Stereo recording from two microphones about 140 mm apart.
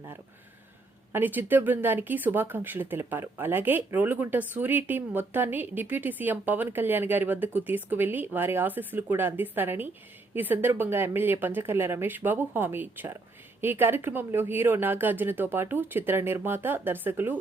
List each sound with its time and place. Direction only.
1.1 s speech: 15° right (ahead or behind)